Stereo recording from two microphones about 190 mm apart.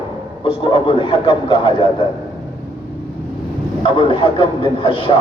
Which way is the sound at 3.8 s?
25° left (ahead or behind).